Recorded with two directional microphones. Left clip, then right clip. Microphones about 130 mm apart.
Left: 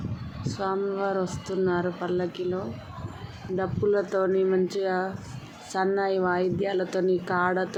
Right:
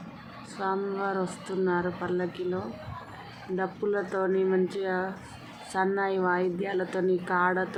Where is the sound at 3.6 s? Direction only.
25° left (ahead or behind).